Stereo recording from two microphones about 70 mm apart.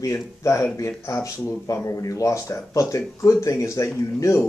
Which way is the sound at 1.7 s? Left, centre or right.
Left.